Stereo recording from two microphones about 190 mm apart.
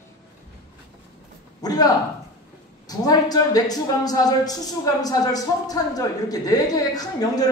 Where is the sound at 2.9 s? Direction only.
20° left (ahead or behind).